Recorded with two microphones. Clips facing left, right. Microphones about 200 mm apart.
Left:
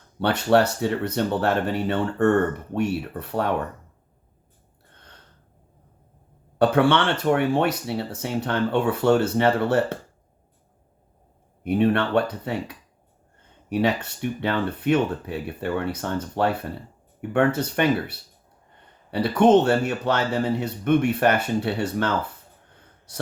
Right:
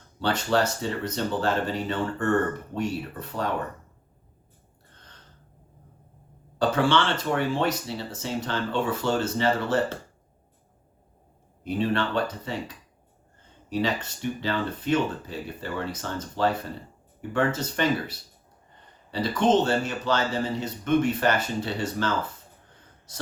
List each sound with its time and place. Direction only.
0.2 s speech: 65° left (ahead or behind)
6.6 s speech: 60° left (ahead or behind)
11.6 s speech: 60° left (ahead or behind)